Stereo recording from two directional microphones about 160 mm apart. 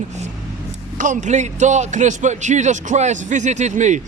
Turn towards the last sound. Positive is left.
turn(degrees=-50)  # may be behind; listen again after turning